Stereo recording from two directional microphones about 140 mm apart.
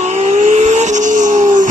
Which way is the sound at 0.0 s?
55° right (ahead or behind).